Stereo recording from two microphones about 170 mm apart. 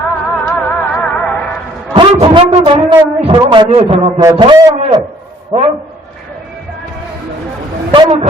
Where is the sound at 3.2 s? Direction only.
30° right (ahead or behind).